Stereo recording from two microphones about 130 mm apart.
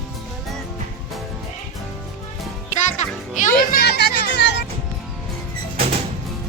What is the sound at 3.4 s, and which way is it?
Music, 90° left.